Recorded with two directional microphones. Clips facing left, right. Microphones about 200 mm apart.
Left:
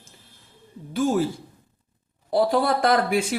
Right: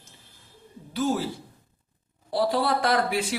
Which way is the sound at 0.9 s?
50° left (ahead or behind).